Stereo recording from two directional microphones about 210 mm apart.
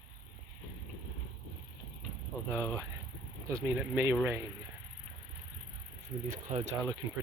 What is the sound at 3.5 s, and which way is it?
Speech, 10° right (ahead or behind).